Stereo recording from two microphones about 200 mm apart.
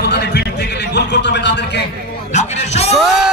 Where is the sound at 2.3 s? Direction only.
35° left (ahead or behind).